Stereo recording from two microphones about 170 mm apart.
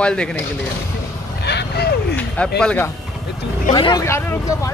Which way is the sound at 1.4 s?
80° left.